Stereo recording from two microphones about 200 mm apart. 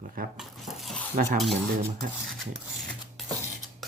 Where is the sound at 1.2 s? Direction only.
40° right (ahead or behind).